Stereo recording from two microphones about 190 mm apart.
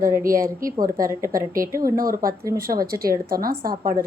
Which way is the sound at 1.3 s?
45° right (ahead or behind).